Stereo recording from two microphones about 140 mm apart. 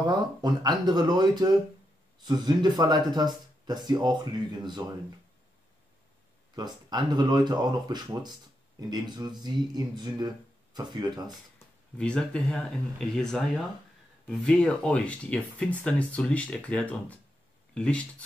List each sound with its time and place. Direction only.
0.0 s speech: 30° right (ahead or behind)
6.5 s speech: 30° right (ahead or behind)
12.0 s speech: 10° left (ahead or behind)